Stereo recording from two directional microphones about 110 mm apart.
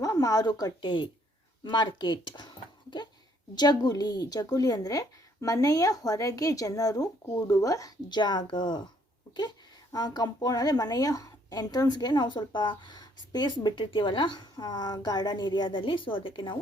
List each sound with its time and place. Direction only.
0.0 s a woman's voice: 30° left (ahead or behind)
9.9 s speech: 35° left (ahead or behind)